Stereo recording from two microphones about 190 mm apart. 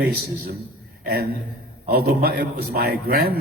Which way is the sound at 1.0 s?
55° right (ahead or behind).